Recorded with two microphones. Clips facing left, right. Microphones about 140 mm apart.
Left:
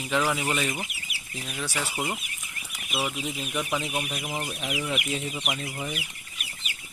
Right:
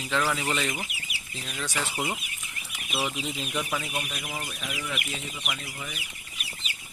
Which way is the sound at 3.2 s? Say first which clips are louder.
Left 1 dB; 10° left (ahead or behind).